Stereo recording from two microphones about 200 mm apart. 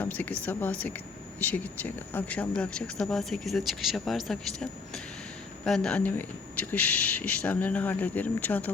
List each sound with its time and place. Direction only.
0.0 s speech: 10° left (ahead or behind)